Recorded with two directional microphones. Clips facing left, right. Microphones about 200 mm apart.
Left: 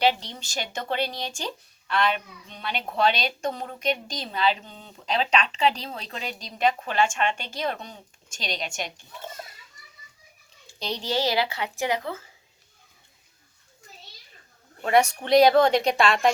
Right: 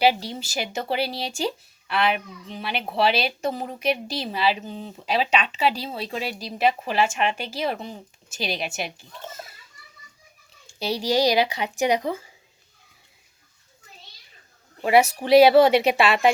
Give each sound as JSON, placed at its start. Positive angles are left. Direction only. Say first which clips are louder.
{"t": 0.0, "sound": "speech", "louder": "right 3 dB", "side_deg": -10}
{"t": 9.3, "sound": "children playing", "louder": "even", "side_deg": -5}
{"t": 10.8, "sound": "speech", "louder": "right 5 dB", "side_deg": -10}
{"t": 14.8, "sound": "speech", "louder": "right 3 dB", "side_deg": -5}